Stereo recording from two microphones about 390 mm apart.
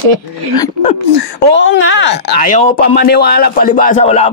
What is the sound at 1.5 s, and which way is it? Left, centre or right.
Speech, left.